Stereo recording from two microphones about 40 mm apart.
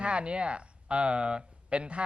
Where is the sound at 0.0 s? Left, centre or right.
Right.